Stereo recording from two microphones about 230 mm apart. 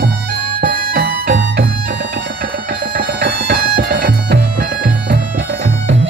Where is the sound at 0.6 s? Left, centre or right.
Right.